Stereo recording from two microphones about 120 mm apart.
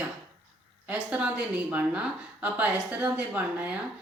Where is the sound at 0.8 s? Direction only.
10° right (ahead or behind).